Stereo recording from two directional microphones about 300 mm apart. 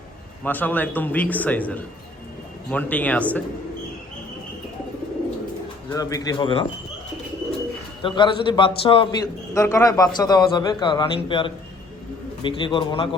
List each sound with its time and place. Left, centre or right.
0.4 s a man's voice: centre
5.9 s a man's voice: centre
8.0 s a man's voice: centre